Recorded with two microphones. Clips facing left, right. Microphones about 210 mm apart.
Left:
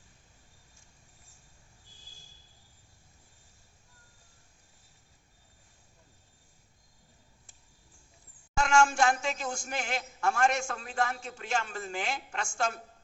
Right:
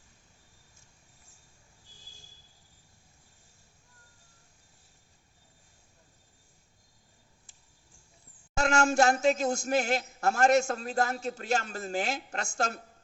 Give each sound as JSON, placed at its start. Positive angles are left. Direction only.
{"t": 8.5, "sound": "a man's voice", "side_deg": -40}